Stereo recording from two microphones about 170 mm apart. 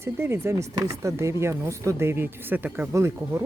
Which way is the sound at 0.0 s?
15° right (ahead or behind).